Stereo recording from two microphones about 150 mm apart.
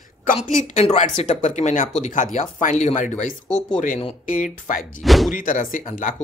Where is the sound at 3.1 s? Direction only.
5° left (ahead or behind).